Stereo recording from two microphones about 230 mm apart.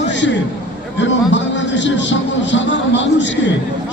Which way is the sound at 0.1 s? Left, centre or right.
Left.